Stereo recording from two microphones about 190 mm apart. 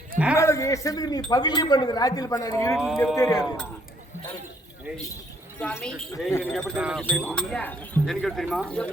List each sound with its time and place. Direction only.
0.3 s a woman's voice: 15° left (ahead or behind)
2.7 s speech: centre (ahead or behind)
3.2 s speech: 20° left (ahead or behind)
5.5 s a woman's voice: 5° left (ahead or behind)
6.7 s speech: 5° right (ahead or behind)
7.0 s speech: 5° left (ahead or behind)